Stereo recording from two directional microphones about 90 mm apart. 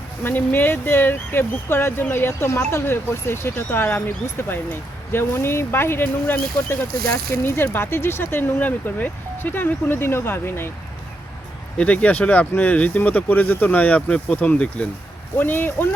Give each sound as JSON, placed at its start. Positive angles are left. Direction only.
{"t": 0.2, "sound": "speech", "side_deg": 20}
{"t": 11.8, "sound": "speech", "side_deg": 15}